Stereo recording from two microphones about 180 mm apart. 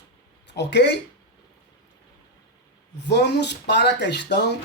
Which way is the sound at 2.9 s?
70° left (ahead or behind).